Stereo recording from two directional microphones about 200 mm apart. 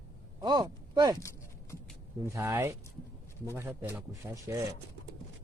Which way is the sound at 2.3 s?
15° right (ahead or behind).